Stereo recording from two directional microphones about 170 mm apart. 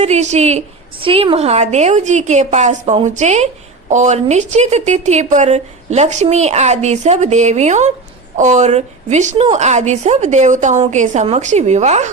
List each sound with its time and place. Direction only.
0.0 s a woman's voice: 40° right (ahead or behind)